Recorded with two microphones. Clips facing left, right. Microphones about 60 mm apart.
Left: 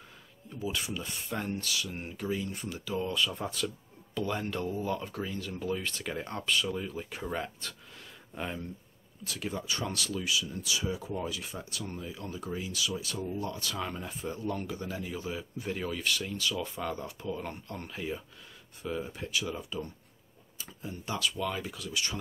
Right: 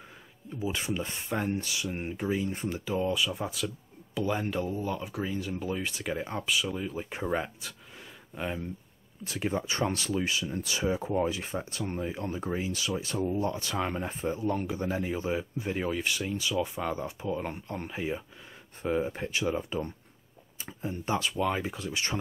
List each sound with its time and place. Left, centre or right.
0.6 s speech: right
3.1 s speech: centre
7.1 s speech: right
9.2 s speech: right